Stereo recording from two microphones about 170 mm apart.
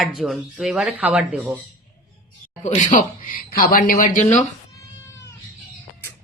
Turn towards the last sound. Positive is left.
turn(degrees=45)  # may be behind; listen again after turning